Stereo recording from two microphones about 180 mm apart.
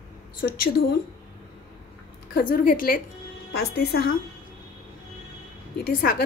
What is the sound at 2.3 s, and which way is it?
Speech, 50° left (ahead or behind).